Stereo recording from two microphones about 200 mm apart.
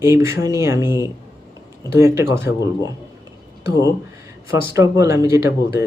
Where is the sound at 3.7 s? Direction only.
15° right (ahead or behind).